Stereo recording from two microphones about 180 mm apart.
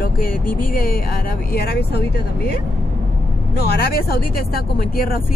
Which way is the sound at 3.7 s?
60° left (ahead or behind).